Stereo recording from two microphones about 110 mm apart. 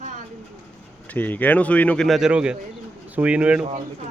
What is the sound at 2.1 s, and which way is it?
Speech, 5° right (ahead or behind).